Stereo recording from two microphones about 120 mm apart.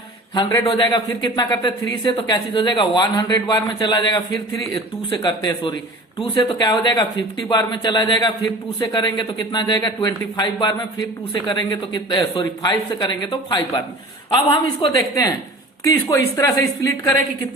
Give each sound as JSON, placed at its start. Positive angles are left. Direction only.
{"t": 0.6, "sound": "a woman's voice", "side_deg": 45}
{"t": 14.9, "sound": "speech", "side_deg": 25}